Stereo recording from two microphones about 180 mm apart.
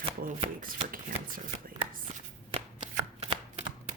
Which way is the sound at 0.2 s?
55° right (ahead or behind).